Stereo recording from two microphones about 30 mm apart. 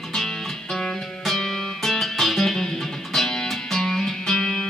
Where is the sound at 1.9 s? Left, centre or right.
Centre.